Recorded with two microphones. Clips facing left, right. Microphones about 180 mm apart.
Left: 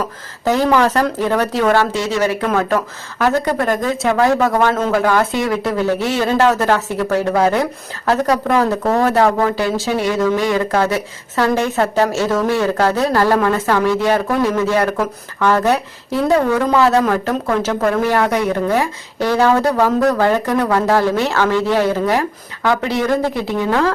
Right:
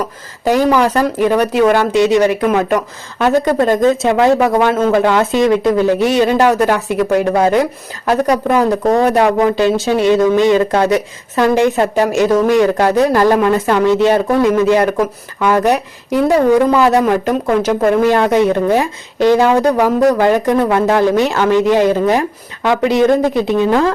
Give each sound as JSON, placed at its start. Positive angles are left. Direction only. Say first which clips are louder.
{"t": 0.4, "sound": "speech", "louder": "right 2 dB", "side_deg": -15}